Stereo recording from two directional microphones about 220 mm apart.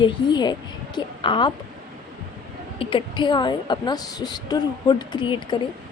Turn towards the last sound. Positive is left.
turn(degrees=20)  # may be behind; listen again after turning